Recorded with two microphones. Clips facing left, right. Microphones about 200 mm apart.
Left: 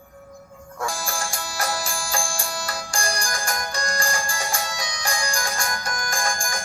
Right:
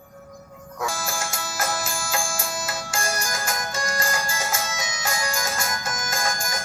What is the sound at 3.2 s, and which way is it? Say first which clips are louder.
Music: even; 20° right (ahead or behind).